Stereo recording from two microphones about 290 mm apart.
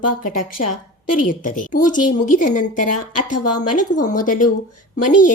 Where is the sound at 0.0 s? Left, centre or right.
Left.